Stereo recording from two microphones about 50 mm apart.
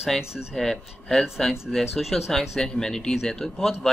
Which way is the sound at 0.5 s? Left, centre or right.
Centre.